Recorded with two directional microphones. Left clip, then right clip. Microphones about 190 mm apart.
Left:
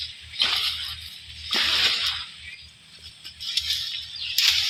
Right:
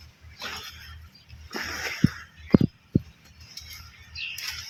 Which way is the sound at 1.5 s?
20° left (ahead or behind).